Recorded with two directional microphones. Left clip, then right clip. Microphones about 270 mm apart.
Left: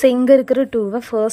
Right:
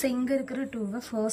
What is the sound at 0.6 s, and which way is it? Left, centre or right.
Speech, centre.